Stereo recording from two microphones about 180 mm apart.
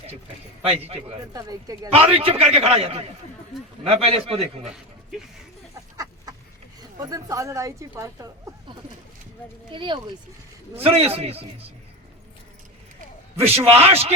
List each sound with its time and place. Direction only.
1.3 s speech: 20° right (ahead or behind)
2.0 s a man's voice: 30° right (ahead or behind)
6.9 s a woman's voice: 20° right (ahead or behind)
9.7 s a man's voice: 25° right (ahead or behind)
13.4 s a man's voice: 35° right (ahead or behind)